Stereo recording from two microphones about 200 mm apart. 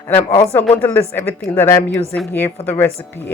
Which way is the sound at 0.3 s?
25° left (ahead or behind).